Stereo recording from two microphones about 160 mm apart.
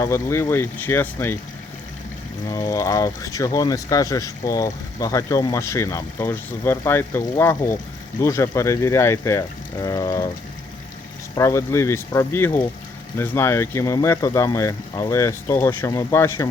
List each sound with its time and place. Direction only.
0.0 s speech: 15° left (ahead or behind)
2.5 s speech: 20° left (ahead or behind)
11.3 s speech: 20° left (ahead or behind)